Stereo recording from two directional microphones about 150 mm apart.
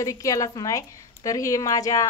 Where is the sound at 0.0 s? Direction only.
20° left (ahead or behind).